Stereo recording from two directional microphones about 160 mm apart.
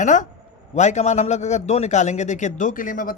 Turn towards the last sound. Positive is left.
turn(degrees=55)  # may be behind; listen again after turning